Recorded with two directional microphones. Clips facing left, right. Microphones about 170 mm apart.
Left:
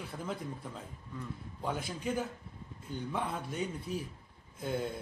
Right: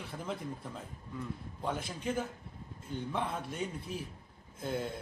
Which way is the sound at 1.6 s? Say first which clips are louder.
Left 1 dB; centre (ahead or behind).